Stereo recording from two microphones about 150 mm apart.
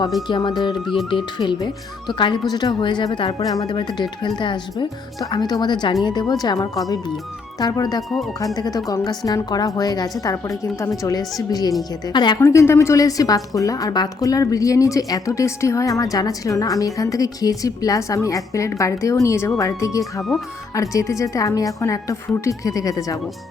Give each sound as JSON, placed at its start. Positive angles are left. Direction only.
{"t": 0.3, "sound": "a woman's voice", "side_deg": 30}